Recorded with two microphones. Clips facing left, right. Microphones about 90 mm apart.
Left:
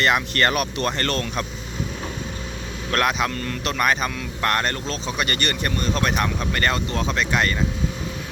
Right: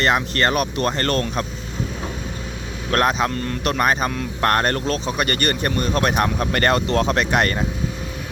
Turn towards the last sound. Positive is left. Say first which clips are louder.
# right 3 dB
turn(degrees=-50)  # may be behind; listen again after turning